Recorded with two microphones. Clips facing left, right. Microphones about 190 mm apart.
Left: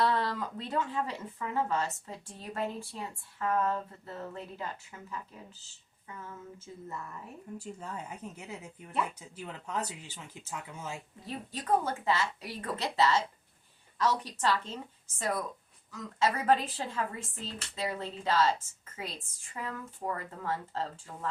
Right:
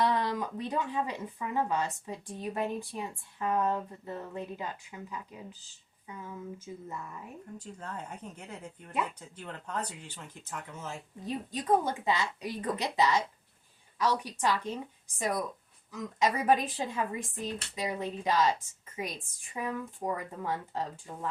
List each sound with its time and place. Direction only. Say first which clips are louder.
0.0 s speech: right 1 dB; 15° right (ahead or behind)
7.6 s speech: even; 10° left (ahead or behind)
11.3 s speech: right 2 dB; 15° right (ahead or behind)